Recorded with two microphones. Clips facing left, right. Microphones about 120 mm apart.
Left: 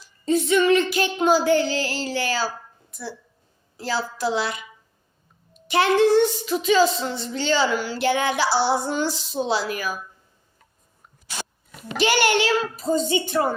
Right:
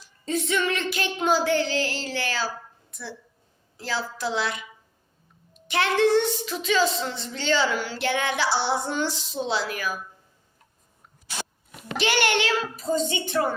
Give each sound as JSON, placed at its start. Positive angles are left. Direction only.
{"t": 0.3, "sound": "child singing", "side_deg": 5}
{"t": 3.8, "sound": "child singing", "side_deg": 5}
{"t": 5.6, "sound": "child singing", "side_deg": 5}
{"t": 9.4, "sound": "speech", "side_deg": 5}
{"t": 11.8, "sound": "child singing", "side_deg": 5}
{"t": 13.1, "sound": "speech", "side_deg": 40}